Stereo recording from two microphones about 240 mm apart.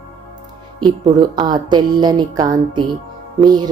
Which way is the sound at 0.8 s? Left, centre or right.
Centre.